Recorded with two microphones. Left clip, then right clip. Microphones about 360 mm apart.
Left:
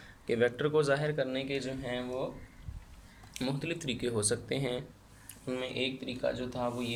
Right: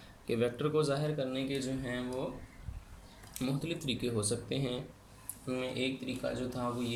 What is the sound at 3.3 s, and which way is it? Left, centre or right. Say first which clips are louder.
Speech: left 2 dB; left.